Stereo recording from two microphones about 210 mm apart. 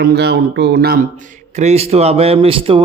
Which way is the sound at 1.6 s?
30° right (ahead or behind).